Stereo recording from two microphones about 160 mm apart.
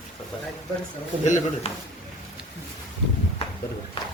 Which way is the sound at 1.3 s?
50° left (ahead or behind).